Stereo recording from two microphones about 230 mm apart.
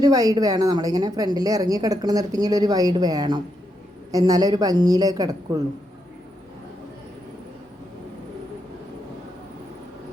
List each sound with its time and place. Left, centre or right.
0.0 s speech: centre